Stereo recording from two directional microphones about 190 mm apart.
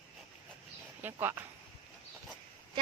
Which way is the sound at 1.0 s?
10° right (ahead or behind).